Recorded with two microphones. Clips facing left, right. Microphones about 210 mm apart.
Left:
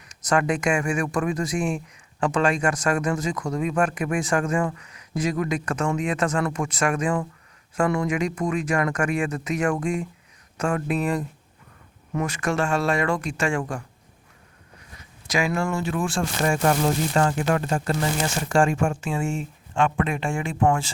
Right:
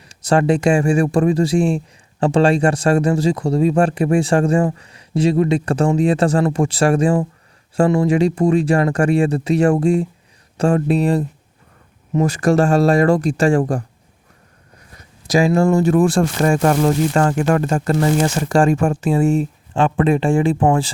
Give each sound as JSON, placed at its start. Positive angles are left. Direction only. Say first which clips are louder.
{"t": 0.0, "sound": "speech", "louder": "right 6 dB", "side_deg": -30}
{"t": 15.3, "sound": "speech", "louder": "right 10 dB", "side_deg": -35}
{"t": 17.2, "sound": "speech", "louder": "right 6 dB", "side_deg": -50}
{"t": 18.4, "sound": "speech", "louder": "right 3 dB", "side_deg": -35}